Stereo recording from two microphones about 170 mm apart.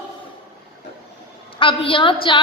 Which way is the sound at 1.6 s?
30° left (ahead or behind).